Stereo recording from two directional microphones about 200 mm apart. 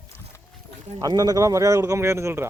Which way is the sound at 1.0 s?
20° right (ahead or behind).